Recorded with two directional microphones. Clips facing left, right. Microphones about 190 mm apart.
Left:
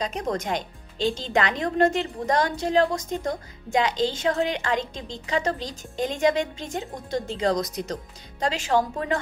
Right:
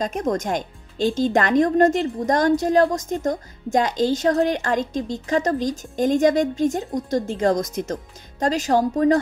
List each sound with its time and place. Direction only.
0.0 s speech: 45° right (ahead or behind)